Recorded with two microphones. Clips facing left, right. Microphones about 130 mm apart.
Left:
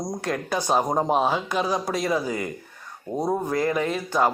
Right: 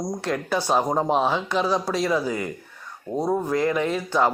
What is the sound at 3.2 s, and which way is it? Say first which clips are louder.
Speech: right 1 dB; 15° left (ahead or behind).